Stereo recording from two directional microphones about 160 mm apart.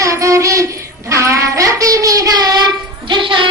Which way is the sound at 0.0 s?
20° right (ahead or behind).